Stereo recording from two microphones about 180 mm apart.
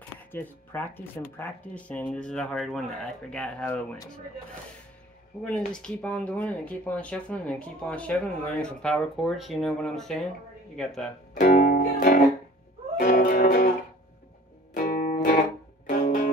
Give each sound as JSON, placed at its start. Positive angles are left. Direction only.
{"t": 0.3, "sound": "speech", "side_deg": 10}
{"t": 5.4, "sound": "speech", "side_deg": 5}
{"t": 11.3, "sound": "music", "side_deg": 50}
{"t": 14.9, "sound": "music", "side_deg": 55}